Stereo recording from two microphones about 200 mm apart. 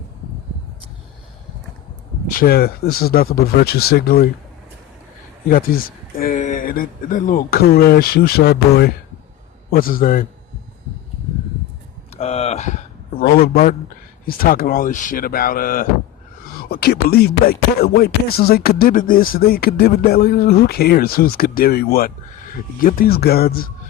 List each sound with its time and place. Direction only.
2.3 s speech: 45° left (ahead or behind)
5.5 s speech: 45° left (ahead or behind)
12.1 s a sound: 30° left (ahead or behind)
13.2 s speech: 50° left (ahead or behind)
13.5 s speech: 35° left (ahead or behind)